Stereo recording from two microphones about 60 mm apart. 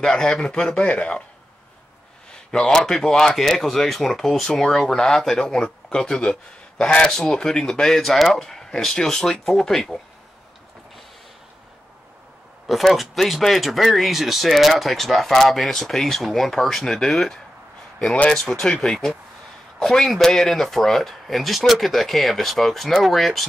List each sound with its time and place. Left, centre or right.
0.0 s speech: centre
2.5 s speech: centre
12.6 s speech: centre
17.9 s speech: left
18.3 s speech: centre